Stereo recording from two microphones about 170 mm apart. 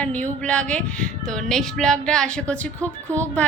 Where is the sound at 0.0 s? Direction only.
10° left (ahead or behind).